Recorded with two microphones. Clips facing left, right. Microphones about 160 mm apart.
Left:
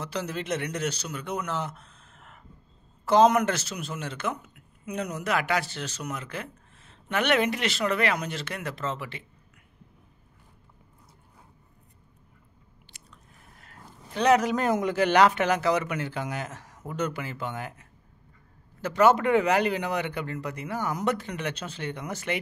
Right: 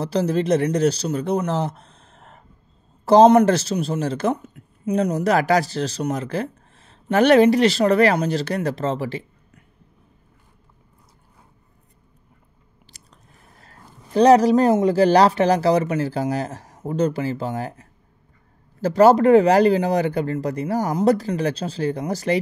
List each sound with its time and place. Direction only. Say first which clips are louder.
0.0 s a man's voice: right 11 dB; 35° right (ahead or behind)
12.9 s a woman's voice: right 2 dB; 35° right (ahead or behind)